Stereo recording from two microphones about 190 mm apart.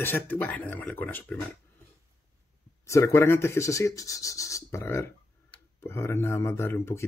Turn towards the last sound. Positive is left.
turn(degrees=15)  # may be behind; listen again after turning